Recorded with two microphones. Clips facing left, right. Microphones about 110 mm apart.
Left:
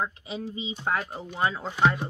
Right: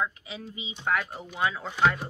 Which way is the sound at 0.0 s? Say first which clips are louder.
Left 1 dB; 30° left (ahead or behind).